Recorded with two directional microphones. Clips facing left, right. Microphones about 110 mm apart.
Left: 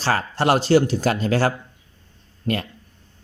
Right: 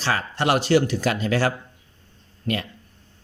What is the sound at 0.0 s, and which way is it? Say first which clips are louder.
Speech: left 3 dB; 35° left (ahead or behind).